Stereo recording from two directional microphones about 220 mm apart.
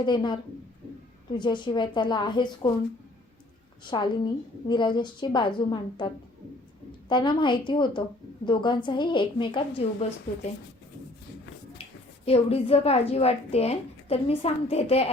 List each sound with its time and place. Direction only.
0.0 s a woman's voice: 20° left (ahead or behind)
3.8 s a woman's voice: 20° left (ahead or behind)
7.1 s a woman's voice: 20° left (ahead or behind)
11.8 s a woman's voice: 25° left (ahead or behind)